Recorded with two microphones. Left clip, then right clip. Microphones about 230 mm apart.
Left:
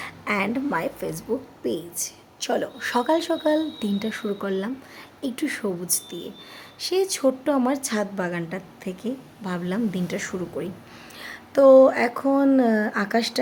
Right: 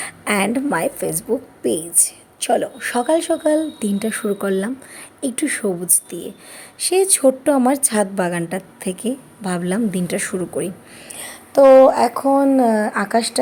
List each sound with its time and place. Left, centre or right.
0.0 s a woman's voice: centre
11.2 s a sound: centre
11.8 s speech: centre